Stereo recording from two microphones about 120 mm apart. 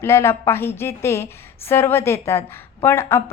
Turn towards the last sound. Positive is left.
turn(degrees=20)  # may be behind; listen again after turning